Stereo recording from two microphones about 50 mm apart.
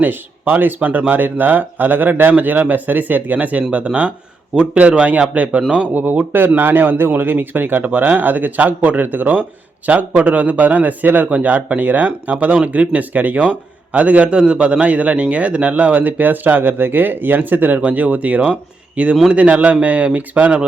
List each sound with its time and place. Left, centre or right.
0.0 s a man's voice: right